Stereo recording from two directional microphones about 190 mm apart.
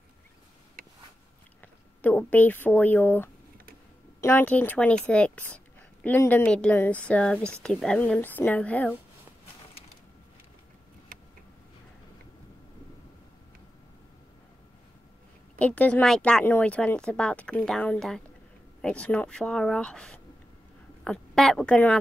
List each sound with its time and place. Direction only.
0.8 s a sound: 50° right (ahead or behind)
1.6 s speech: 10° left (ahead or behind)
15.6 s a woman's voice: 5° left (ahead or behind)